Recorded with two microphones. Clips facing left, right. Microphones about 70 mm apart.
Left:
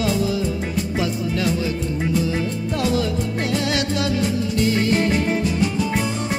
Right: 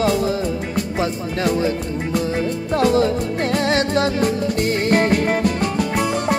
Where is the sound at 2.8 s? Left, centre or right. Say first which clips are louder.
Right 6 dB; right.